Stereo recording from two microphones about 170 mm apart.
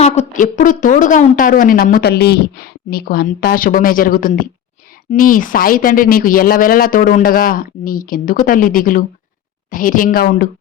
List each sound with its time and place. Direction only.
0.0 s a woman's voice: 40° left (ahead or behind)
0.4 s a woman's voice: 55° left (ahead or behind)